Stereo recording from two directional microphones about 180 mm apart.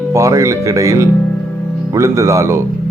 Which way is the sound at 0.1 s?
15° right (ahead or behind).